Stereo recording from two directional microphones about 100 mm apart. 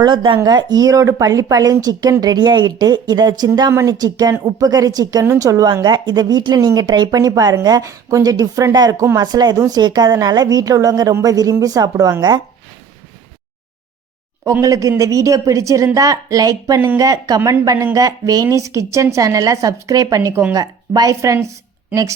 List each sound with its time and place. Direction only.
0.0 s speech: 55° right (ahead or behind)
0.4 s a woman's voice: 45° right (ahead or behind)
14.6 s a woman's voice: 35° right (ahead or behind)